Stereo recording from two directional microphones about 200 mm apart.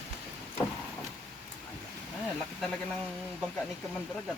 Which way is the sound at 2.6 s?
5° left (ahead or behind).